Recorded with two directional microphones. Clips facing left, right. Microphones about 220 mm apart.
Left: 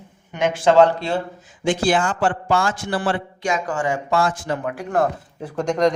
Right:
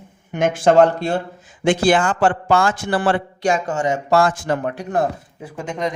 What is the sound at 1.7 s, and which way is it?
A man's voice, 65° right (ahead or behind).